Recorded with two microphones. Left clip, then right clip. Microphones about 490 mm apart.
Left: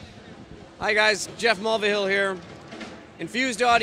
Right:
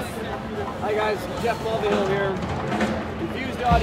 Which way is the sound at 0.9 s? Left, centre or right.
Left.